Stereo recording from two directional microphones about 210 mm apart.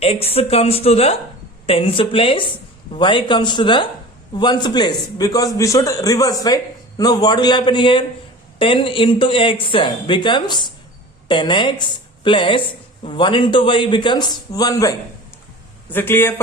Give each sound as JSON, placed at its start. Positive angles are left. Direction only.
{"t": 0.0, "sound": "a man's voice", "side_deg": 30}